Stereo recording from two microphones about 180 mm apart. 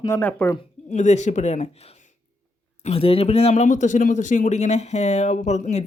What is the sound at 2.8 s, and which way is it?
Speech, 35° left (ahead or behind).